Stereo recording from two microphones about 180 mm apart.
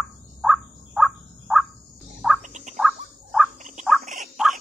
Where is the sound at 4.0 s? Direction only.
40° right (ahead or behind).